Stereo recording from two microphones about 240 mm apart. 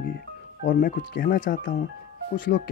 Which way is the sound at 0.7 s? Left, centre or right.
Left.